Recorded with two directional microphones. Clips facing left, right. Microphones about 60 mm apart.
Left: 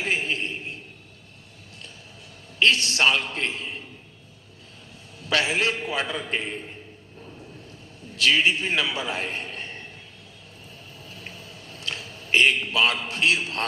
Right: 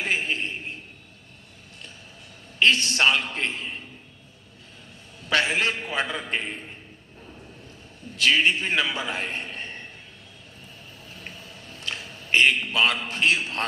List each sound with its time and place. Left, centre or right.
0.0 s a sound: right
2.6 s a man's voice: right
5.5 s a man's voice: right
8.2 s a man's voice: right
11.2 s a sound: right
13.1 s a man's voice: right